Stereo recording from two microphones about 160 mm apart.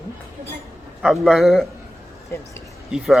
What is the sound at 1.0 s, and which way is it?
Speech, centre (ahead or behind).